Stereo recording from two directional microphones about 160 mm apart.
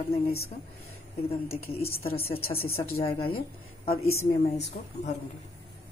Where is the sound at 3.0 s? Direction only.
35° left (ahead or behind).